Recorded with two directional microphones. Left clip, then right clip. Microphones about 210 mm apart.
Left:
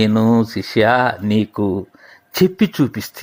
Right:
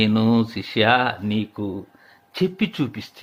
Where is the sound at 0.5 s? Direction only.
20° left (ahead or behind).